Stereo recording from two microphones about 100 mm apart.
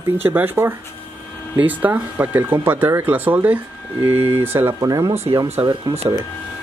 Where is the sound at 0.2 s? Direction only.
20° right (ahead or behind).